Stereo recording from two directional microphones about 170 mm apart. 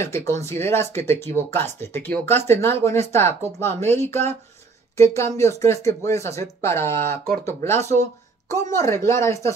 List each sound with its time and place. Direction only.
0.3 s speech: 15° left (ahead or behind)